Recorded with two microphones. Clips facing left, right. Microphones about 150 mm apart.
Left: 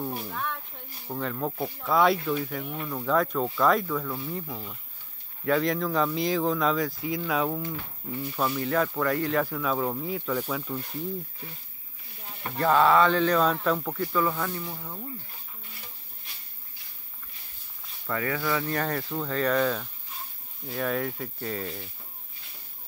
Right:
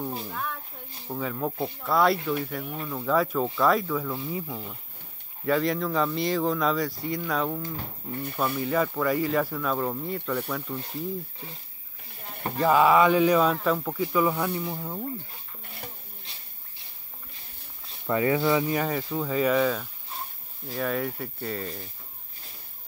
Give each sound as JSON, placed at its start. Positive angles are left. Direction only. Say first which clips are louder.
{"t": 0.3, "sound": "speech", "louder": "even", "side_deg": -5}
{"t": 12.5, "sound": "speech", "louder": "right 1 dB", "side_deg": -10}
{"t": 18.0, "sound": "speech", "louder": "right 6 dB", "side_deg": -20}
{"t": 18.7, "sound": "speech", "louder": "right 2 dB", "side_deg": -5}